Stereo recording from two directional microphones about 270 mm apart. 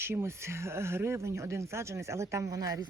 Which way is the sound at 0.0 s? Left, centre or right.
Centre.